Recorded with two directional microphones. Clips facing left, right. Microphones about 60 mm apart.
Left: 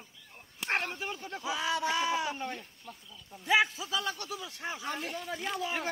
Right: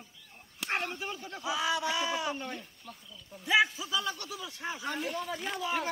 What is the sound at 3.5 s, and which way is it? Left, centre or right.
A man's voice, left.